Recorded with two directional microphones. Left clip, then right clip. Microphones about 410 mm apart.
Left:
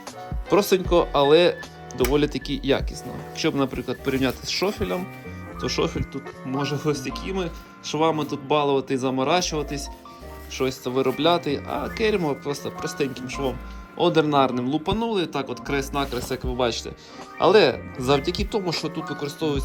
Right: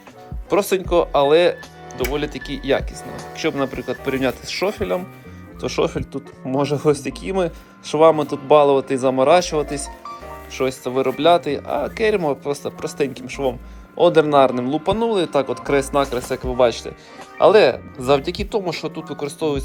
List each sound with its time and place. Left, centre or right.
0.5 s speech: centre